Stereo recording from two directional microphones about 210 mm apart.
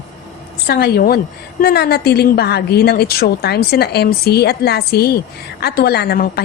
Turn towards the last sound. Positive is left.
turn(degrees=45)  # may be behind; listen again after turning